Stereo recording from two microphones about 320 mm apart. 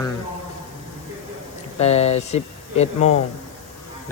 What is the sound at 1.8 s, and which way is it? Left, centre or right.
Speech, centre.